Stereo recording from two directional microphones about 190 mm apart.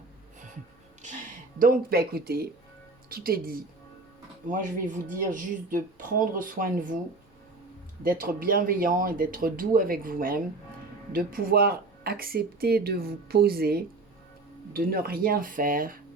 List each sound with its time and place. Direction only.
1.0 s speech: 45° right (ahead or behind)
8.0 s speech: 50° right (ahead or behind)